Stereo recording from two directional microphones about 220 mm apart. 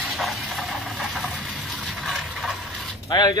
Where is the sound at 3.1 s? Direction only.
15° left (ahead or behind).